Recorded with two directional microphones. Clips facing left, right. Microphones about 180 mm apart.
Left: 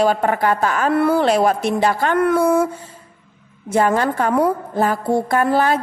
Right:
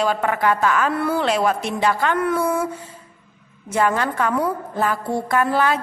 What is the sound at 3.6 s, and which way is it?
Speech, 35° left (ahead or behind).